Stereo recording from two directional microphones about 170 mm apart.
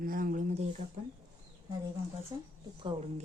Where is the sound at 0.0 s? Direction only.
55° right (ahead or behind).